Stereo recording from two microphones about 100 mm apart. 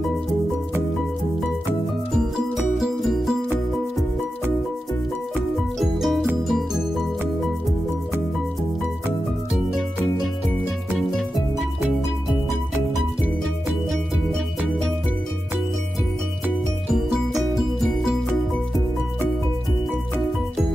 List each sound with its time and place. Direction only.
2.1 s music: centre (ahead or behind)
5.8 s music: centre (ahead or behind)
9.7 s music: centre (ahead or behind)